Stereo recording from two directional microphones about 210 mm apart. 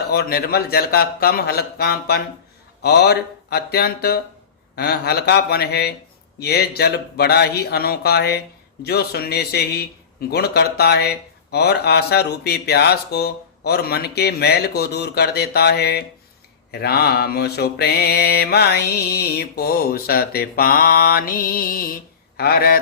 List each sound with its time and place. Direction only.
0.1 s mantra: 45° left (ahead or behind)